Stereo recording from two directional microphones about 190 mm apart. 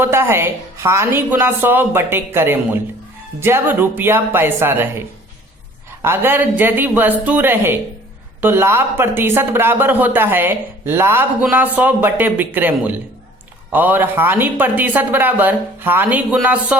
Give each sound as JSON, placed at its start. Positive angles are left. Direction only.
{"t": 0.0, "sound": "speech", "side_deg": -15}